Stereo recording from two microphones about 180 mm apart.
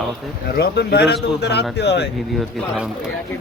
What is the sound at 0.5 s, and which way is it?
A man's voice, 65° left (ahead or behind).